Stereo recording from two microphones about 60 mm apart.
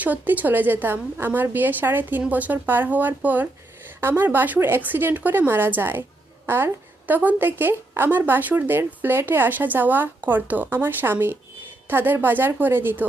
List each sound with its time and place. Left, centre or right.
0.0 s a woman's voice: right